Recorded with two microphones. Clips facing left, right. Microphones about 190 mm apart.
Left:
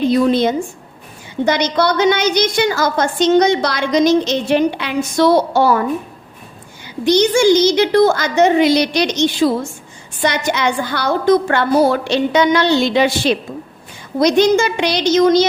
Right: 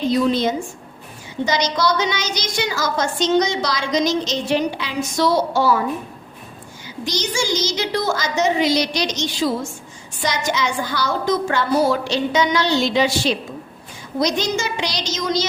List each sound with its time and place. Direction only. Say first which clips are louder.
0.1 s a woman's voice: left 4 dB; 60° left (ahead or behind)
7.0 s a woman's voice: left 12 dB; 60° left (ahead or behind)